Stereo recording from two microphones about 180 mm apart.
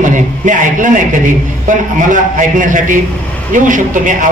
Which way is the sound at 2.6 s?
45° right (ahead or behind).